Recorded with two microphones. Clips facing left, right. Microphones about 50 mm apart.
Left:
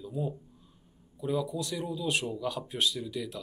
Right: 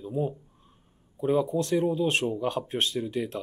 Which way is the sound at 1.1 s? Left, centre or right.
Right.